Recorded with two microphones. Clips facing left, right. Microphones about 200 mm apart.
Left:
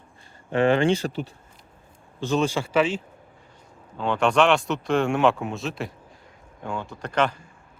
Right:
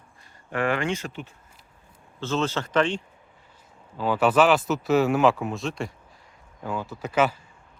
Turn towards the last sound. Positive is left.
turn(degrees=-5)  # may be behind; listen again after turning